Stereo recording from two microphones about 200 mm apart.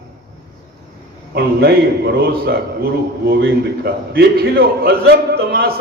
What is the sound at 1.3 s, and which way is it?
A man's voice, 55° right (ahead or behind).